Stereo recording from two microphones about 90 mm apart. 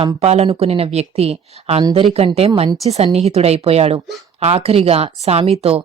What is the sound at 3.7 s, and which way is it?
Speech, 90° right.